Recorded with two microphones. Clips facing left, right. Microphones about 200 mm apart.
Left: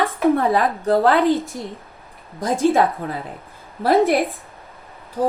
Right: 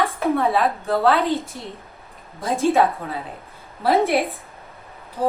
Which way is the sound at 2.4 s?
50° left (ahead or behind).